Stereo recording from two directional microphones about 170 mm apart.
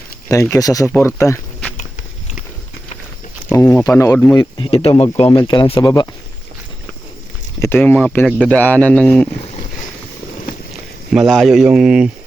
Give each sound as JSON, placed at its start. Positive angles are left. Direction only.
{"t": 0.5, "sound": "speech", "side_deg": 20}
{"t": 3.5, "sound": "speech", "side_deg": 20}
{"t": 4.4, "sound": "speech", "side_deg": 30}
{"t": 7.6, "sound": "speech", "side_deg": 15}
{"t": 11.1, "sound": "speech", "side_deg": 0}